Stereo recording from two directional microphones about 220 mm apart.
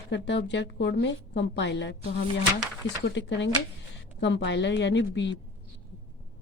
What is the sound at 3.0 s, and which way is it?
A woman's voice, 55° left (ahead or behind).